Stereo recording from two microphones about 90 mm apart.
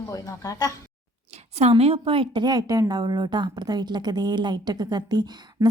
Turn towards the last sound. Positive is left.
turn(degrees=-50)  # may be behind; listen again after turning